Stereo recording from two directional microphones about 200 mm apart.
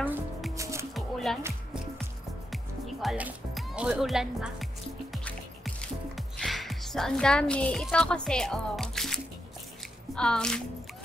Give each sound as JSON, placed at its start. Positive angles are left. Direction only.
{"t": 0.6, "sound": "music", "side_deg": -15}
{"t": 0.9, "sound": "music", "side_deg": 0}
{"t": 2.5, "sound": "music", "side_deg": 0}
{"t": 10.1, "sound": "squish", "side_deg": 5}